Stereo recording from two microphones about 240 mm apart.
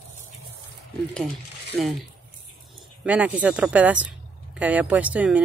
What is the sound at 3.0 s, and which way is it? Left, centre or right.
Speech, centre.